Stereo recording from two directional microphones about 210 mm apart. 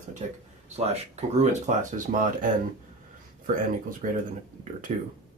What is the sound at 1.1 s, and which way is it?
Speech, 35° right (ahead or behind).